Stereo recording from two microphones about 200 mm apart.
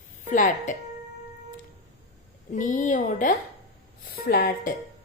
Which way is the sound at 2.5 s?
40° left (ahead or behind).